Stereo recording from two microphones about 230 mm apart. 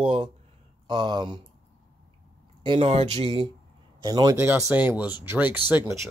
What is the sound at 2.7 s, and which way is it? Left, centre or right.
Speech, right.